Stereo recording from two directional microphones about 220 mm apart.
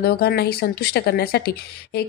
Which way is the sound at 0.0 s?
45° left (ahead or behind).